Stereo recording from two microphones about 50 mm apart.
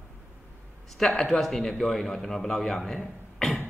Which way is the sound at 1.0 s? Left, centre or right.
Centre.